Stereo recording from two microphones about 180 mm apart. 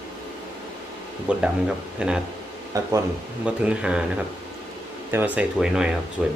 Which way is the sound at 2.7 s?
20° right (ahead or behind).